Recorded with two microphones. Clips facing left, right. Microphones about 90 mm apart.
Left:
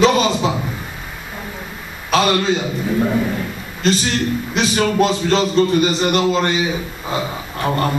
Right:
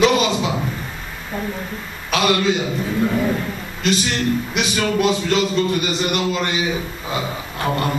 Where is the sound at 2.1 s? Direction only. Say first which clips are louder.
Left 2 dB; 35° left (ahead or behind).